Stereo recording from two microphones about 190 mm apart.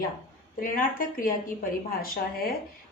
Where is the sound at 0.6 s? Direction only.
45° left (ahead or behind).